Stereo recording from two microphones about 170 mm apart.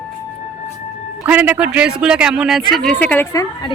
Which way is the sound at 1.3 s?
10° right (ahead or behind).